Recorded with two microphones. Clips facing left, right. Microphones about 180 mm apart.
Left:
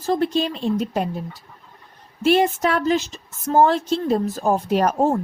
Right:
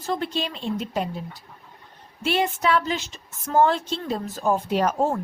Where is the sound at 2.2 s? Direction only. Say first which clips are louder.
Left 5 dB; 45° left (ahead or behind).